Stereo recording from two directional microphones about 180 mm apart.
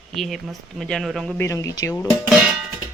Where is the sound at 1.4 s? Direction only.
15° left (ahead or behind).